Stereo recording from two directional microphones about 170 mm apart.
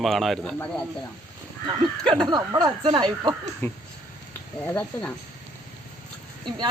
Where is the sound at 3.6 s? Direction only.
15° left (ahead or behind).